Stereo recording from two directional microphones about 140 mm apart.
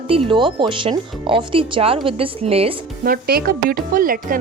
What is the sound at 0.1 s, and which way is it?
Speech, 40° right (ahead or behind).